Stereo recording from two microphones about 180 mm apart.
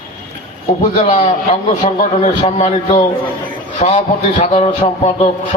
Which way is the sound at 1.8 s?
40° left (ahead or behind).